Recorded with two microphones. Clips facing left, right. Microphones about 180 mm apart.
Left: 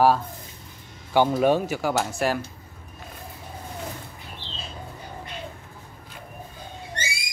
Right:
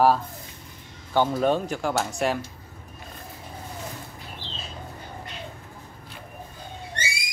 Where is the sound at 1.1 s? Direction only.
10° left (ahead or behind).